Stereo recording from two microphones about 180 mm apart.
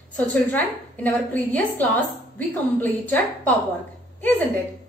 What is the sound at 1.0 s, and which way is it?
A woman's voice, 10° left (ahead or behind).